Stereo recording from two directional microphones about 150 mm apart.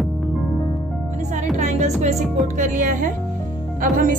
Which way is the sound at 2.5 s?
60° right (ahead or behind).